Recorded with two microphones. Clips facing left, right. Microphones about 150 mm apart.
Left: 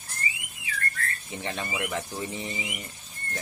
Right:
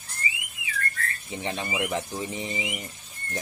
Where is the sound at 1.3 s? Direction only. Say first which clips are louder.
Right 3 dB; 15° right (ahead or behind).